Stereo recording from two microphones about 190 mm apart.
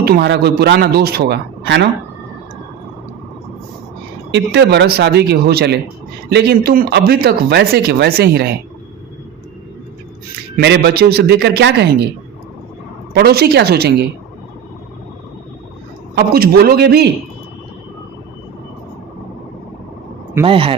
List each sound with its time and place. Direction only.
0.0 s speech: 55° right (ahead or behind)
4.3 s speech: 65° right (ahead or behind)
10.6 s speech: 60° right (ahead or behind)
13.1 s speech: 55° right (ahead or behind)
16.1 s speech: 55° right (ahead or behind)
20.4 s speech: 30° right (ahead or behind)